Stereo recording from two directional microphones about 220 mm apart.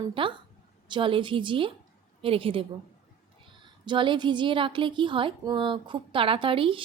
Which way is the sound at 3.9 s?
20° right (ahead or behind).